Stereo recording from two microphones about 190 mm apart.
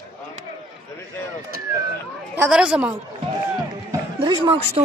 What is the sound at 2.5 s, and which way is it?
Speech, 5° right (ahead or behind).